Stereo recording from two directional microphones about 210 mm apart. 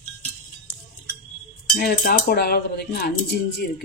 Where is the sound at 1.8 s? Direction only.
40° left (ahead or behind).